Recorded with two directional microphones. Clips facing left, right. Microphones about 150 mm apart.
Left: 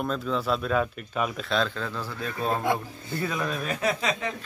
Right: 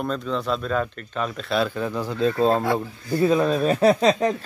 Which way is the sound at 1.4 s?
10° right (ahead or behind).